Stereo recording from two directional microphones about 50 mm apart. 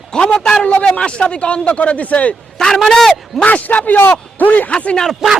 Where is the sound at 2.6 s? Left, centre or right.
Centre.